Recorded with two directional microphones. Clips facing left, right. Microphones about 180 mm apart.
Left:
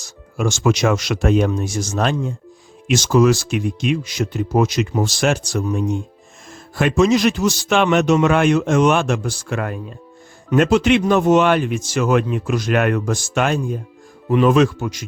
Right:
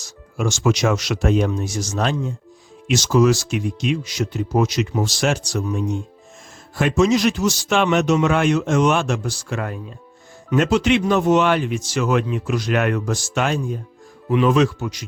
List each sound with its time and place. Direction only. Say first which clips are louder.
0.0 s a man's voice: left 2 dB; 55° left (ahead or behind)